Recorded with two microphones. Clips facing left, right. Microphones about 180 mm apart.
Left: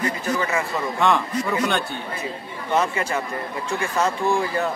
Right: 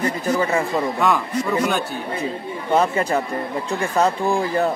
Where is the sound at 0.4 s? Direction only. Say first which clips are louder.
Right 5 dB; 35° right (ahead or behind).